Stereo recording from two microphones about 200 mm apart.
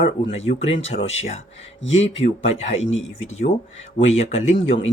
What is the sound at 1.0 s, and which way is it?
Speech, 30° left (ahead or behind).